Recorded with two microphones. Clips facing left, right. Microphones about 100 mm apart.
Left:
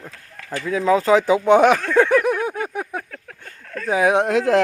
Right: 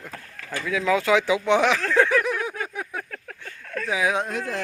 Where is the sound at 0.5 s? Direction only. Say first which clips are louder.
Left 5 dB; 35° left (ahead or behind).